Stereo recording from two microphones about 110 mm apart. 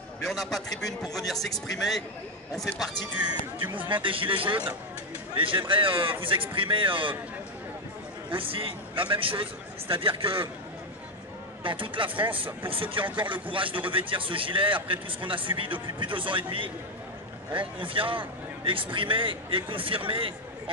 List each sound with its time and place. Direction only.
0.3 s speech: centre (ahead or behind)
3.9 s speech: 50° right (ahead or behind)
8.3 s speech: 55° right (ahead or behind)
11.6 s speech: 50° right (ahead or behind)